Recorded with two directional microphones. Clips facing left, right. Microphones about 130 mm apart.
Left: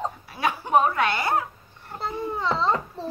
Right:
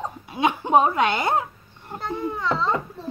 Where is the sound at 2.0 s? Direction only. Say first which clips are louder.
Right 1 dB; 30° left (ahead or behind).